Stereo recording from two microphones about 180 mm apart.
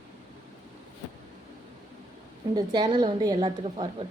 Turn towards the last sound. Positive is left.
turn(degrees=-25)  # may be behind; listen again after turning